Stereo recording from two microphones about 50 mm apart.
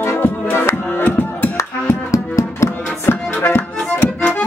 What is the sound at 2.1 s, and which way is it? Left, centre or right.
Music, left.